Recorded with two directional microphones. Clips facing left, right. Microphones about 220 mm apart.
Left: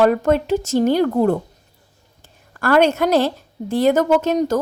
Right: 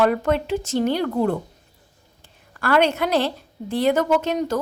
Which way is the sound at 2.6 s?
45° left (ahead or behind).